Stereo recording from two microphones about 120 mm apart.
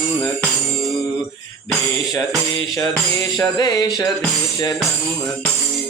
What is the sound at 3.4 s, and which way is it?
Music, 35° left (ahead or behind).